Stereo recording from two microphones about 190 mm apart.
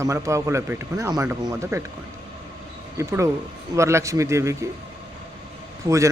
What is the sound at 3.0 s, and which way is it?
Speech, 15° right (ahead or behind).